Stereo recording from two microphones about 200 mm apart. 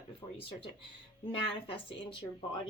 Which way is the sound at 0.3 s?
25° left (ahead or behind).